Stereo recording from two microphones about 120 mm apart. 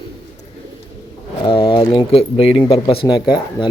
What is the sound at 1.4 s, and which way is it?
Speech, 45° left (ahead or behind).